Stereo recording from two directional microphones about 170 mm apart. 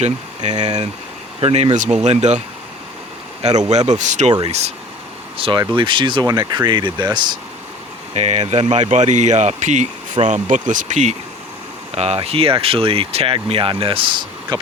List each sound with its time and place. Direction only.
0.0 s speech: 40° right (ahead or behind)
3.7 s speech: 40° right (ahead or behind)
5.4 s speech: 30° right (ahead or behind)
8.1 s speech: 40° right (ahead or behind)